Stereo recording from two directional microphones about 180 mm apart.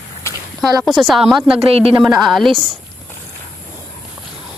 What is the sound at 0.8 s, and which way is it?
Speech, centre (ahead or behind).